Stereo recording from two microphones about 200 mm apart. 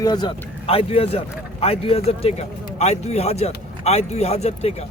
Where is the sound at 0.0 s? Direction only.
20° left (ahead or behind).